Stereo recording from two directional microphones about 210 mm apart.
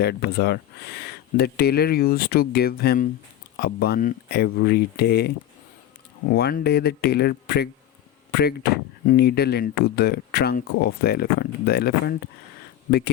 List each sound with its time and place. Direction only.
0.0 s speech: 50° left (ahead or behind)